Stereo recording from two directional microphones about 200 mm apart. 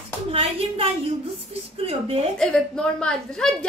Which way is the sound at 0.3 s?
30° right (ahead or behind).